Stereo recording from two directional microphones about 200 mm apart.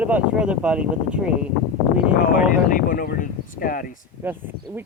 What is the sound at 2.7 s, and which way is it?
Speech, 45° left (ahead or behind).